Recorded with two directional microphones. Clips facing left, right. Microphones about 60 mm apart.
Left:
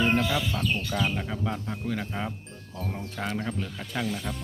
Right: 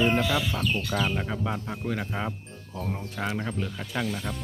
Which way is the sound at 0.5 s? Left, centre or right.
Right.